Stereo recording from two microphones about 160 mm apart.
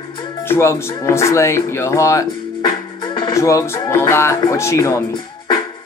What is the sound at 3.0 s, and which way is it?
Music, 30° left (ahead or behind).